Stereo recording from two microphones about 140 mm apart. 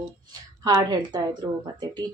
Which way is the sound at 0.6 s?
25° right (ahead or behind).